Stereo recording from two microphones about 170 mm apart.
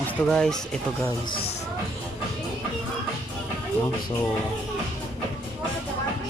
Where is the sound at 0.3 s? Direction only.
5° left (ahead or behind).